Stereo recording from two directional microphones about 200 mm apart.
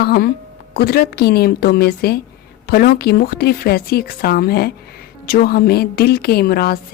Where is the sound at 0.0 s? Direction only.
50° left (ahead or behind).